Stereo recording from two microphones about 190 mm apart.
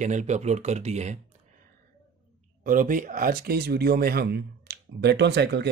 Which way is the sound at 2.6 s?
45° right (ahead or behind).